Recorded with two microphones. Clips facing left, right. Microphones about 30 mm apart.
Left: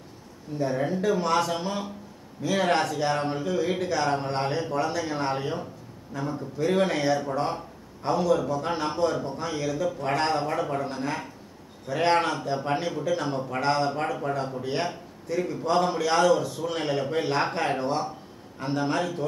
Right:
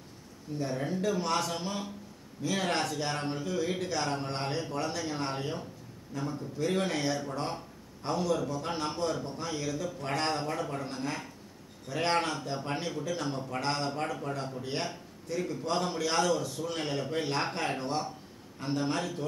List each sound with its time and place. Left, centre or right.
0.6 s speech: centre